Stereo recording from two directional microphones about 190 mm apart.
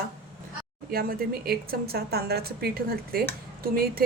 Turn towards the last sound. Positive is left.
turn(degrees=-50)  # may be behind; listen again after turning